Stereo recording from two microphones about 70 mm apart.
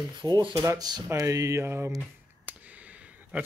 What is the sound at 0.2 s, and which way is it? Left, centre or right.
Speech, right.